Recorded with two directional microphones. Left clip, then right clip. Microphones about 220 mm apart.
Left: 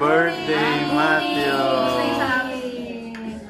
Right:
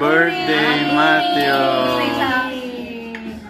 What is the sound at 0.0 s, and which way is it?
Music, 10° right (ahead or behind).